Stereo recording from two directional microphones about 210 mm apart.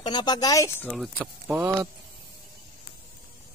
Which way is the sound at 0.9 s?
Centre (ahead or behind).